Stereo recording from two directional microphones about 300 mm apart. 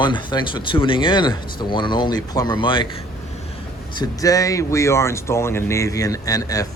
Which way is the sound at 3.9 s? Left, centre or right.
Centre.